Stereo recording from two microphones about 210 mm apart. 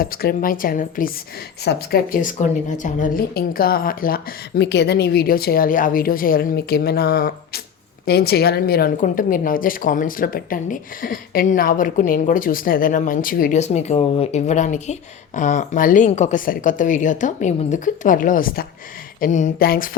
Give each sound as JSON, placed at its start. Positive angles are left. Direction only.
{"t": 0.0, "sound": "a woman's voice", "side_deg": 45}